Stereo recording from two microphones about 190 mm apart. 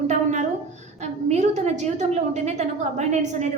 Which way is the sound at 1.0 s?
35° right (ahead or behind).